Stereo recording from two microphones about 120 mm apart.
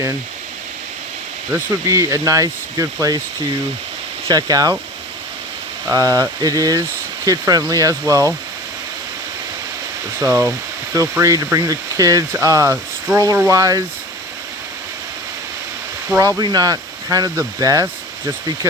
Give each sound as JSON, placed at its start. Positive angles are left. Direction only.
{"t": 1.5, "sound": "speech", "side_deg": -25}
{"t": 4.3, "sound": "speech", "side_deg": -30}
{"t": 5.9, "sound": "speech", "side_deg": -30}
{"t": 10.2, "sound": "speech", "side_deg": -25}
{"t": 16.0, "sound": "speech", "side_deg": -25}